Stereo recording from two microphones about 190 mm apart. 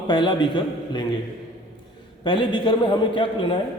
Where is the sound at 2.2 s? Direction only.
25° left (ahead or behind).